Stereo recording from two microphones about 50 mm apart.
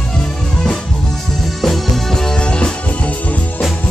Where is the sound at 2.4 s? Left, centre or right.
Left.